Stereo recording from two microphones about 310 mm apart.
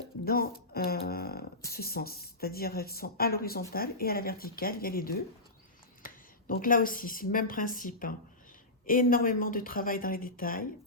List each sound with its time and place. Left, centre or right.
0.3 s a woman's voice: left
6.0 s a sound: left
6.5 s a woman's voice: left